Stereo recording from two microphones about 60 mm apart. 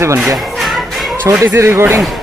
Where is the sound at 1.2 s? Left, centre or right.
Right.